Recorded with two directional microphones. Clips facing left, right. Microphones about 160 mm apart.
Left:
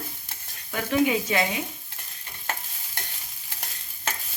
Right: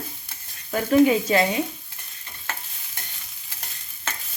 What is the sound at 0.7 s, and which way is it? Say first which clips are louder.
Speech: right 6 dB; 35° right (ahead or behind).